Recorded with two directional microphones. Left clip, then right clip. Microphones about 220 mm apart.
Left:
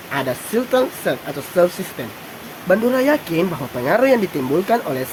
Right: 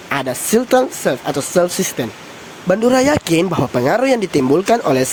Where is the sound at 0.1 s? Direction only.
35° right (ahead or behind).